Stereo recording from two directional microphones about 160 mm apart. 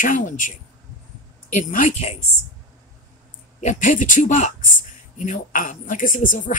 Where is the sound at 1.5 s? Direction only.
55° left (ahead or behind).